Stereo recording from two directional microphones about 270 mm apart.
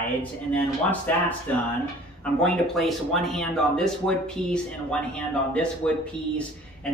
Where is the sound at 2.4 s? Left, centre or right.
Centre.